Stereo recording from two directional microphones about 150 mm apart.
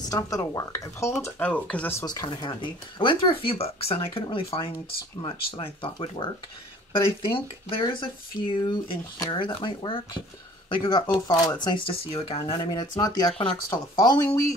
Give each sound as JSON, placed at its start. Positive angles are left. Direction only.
{"t": 0.0, "sound": "speech", "side_deg": 25}
{"t": 2.0, "sound": "speech", "side_deg": 30}